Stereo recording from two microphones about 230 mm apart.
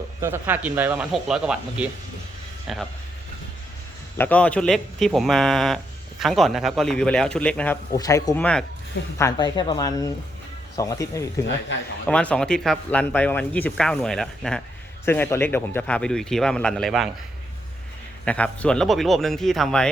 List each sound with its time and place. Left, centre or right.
0.2 s speech: centre
4.2 s speech: centre
7.9 s speech: centre
18.3 s speech: centre